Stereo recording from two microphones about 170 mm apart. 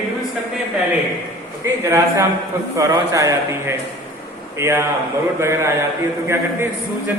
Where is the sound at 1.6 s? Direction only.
20° right (ahead or behind).